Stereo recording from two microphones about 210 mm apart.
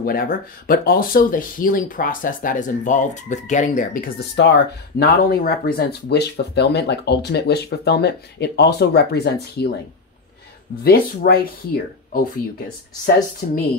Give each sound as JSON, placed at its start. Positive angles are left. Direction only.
{"t": 0.0, "sound": "speech", "side_deg": 45}
{"t": 4.4, "sound": "speech", "side_deg": 50}
{"t": 10.8, "sound": "speech", "side_deg": 45}
{"t": 13.4, "sound": "speech", "side_deg": 40}